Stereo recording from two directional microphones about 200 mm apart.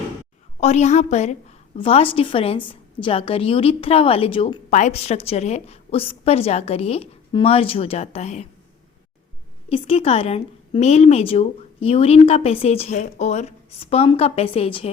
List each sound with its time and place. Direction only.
0.6 s a woman's voice: 35° left (ahead or behind)
9.6 s a woman's voice: 30° left (ahead or behind)